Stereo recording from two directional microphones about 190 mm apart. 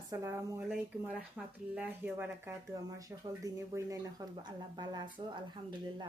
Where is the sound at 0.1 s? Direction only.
15° right (ahead or behind).